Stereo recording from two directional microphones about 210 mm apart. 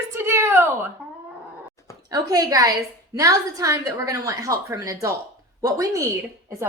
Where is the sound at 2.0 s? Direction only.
15° right (ahead or behind).